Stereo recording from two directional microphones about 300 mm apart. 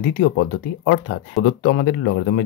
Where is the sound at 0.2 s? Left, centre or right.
Left.